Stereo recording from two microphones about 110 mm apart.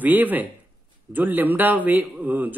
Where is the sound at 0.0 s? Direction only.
15° right (ahead or behind).